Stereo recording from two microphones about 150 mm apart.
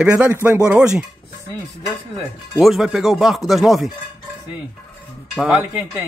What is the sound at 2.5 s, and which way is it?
Speech, centre (ahead or behind).